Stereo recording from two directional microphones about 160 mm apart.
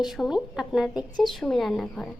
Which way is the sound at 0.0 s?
Centre (ahead or behind).